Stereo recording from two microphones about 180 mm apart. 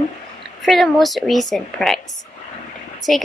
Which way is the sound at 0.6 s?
Centre (ahead or behind).